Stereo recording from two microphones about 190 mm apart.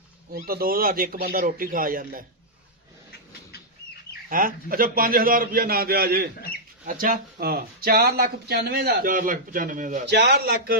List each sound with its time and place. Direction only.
0.3 s speech: 50° right (ahead or behind)
4.3 s speech: 45° right (ahead or behind)
10.1 s a man's voice: 60° right (ahead or behind)